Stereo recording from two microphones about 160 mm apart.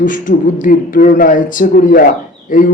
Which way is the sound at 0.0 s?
55° left (ahead or behind).